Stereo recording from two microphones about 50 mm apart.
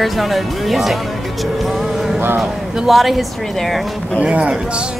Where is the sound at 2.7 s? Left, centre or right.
Centre.